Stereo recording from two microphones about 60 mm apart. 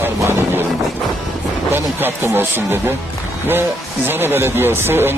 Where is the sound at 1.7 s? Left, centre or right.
Right.